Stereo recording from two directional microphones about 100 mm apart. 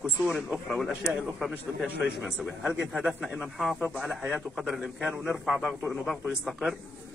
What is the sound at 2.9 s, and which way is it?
Speech, 10° right (ahead or behind).